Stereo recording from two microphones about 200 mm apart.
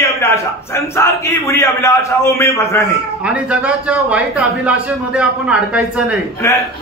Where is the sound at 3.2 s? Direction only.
5° right (ahead or behind).